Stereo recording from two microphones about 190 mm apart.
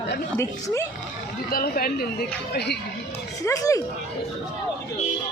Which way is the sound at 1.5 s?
50° left (ahead or behind).